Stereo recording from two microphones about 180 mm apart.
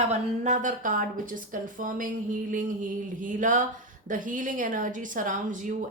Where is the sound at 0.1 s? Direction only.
40° right (ahead or behind).